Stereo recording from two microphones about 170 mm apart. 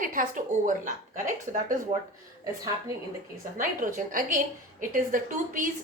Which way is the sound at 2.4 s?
20° right (ahead or behind).